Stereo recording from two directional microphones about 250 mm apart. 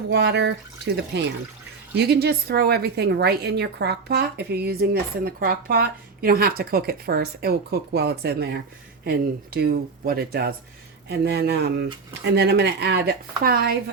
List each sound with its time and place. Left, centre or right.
0.1 s a woman's voice: right